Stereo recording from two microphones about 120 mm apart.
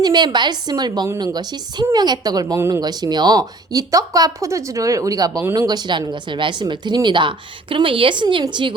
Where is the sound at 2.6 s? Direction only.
20° right (ahead or behind).